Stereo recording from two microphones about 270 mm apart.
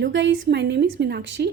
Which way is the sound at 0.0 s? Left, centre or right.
Right.